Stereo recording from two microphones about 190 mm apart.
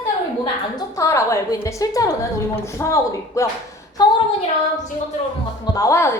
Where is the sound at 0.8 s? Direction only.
15° left (ahead or behind).